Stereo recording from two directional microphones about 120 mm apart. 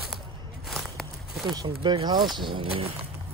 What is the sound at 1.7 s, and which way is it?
Speech, 45° right (ahead or behind).